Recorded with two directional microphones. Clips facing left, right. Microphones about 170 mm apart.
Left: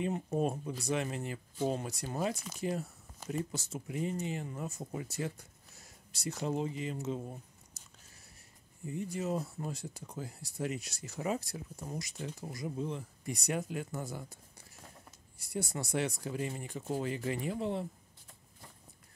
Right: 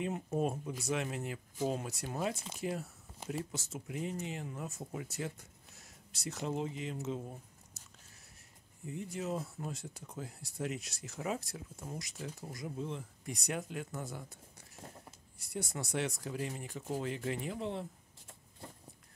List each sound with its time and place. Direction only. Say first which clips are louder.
0.0 s speech: left 2 dB; centre (ahead or behind)
2.3 s speech: left 1 dB; 25° right (ahead or behind)
2.6 s speech: left 2 dB; 5° right (ahead or behind)
8.8 s speech: left 3 dB; centre (ahead or behind)